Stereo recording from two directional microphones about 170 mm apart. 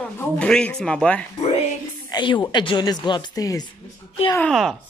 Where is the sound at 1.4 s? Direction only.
40° left (ahead or behind).